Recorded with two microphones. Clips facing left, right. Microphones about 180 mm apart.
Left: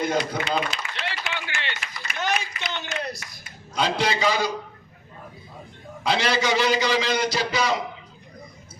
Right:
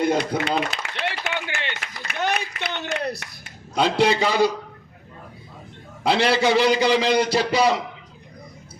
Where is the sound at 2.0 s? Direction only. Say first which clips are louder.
Right 2 dB; 60° right (ahead or behind).